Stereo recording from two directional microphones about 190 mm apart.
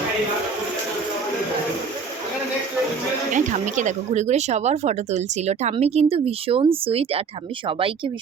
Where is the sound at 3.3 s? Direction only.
40° right (ahead or behind).